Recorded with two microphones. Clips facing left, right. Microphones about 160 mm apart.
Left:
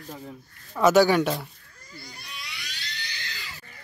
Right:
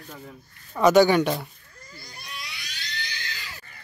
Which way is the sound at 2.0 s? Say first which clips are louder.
Right 3 dB; 40° right (ahead or behind).